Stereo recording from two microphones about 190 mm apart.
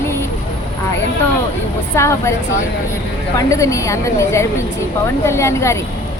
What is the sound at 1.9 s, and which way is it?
Speech, 15° left (ahead or behind).